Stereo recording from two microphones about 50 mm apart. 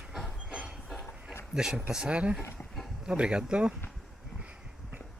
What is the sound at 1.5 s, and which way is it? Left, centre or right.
Speech, centre.